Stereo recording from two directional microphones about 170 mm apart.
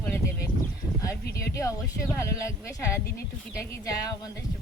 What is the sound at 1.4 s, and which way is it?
Speech, 15° left (ahead or behind).